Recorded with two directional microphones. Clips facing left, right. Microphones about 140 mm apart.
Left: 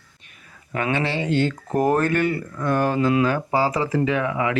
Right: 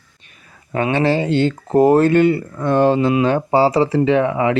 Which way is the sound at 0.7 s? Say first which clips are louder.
Right 7 dB; 30° right (ahead or behind).